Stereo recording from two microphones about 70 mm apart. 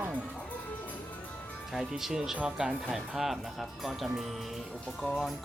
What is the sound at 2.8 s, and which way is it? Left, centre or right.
Speech, centre.